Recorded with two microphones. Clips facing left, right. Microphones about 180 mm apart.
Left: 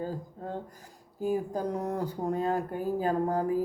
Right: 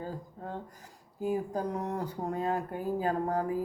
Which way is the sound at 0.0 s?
35° left (ahead or behind).